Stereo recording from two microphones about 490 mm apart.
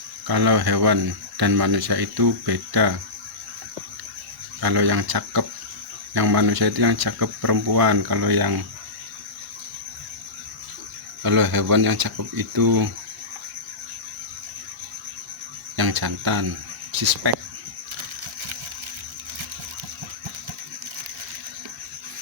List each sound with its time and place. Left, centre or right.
0.3 s speech: right
4.6 s speech: right
11.2 s speech: right
15.7 s speech: right